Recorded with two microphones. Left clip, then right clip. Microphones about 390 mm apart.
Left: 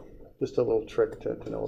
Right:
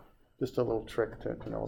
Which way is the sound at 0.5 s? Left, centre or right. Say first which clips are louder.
Left 6 dB; right.